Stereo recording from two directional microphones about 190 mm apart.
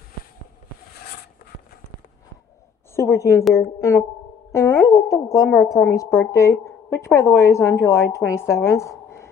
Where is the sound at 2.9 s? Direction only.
15° left (ahead or behind).